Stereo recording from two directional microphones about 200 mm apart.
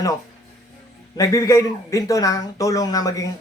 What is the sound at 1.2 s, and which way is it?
Speech, 15° left (ahead or behind).